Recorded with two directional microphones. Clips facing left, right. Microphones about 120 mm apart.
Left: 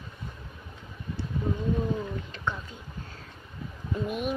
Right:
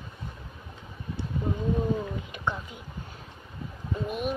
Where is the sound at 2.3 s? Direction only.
15° right (ahead or behind).